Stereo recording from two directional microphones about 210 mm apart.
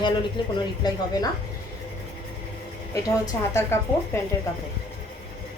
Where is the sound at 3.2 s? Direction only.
15° left (ahead or behind).